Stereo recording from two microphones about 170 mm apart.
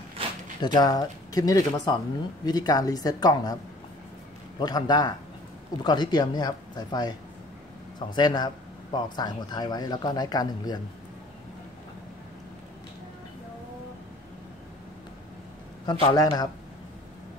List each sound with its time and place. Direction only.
0.2 s a sound: 35° right (ahead or behind)
0.7 s speech: 20° left (ahead or behind)
4.6 s speech: 25° left (ahead or behind)
15.8 s speech: 25° left (ahead or behind)